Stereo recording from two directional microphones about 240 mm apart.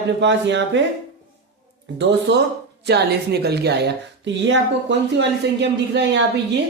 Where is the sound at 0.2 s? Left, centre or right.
Right.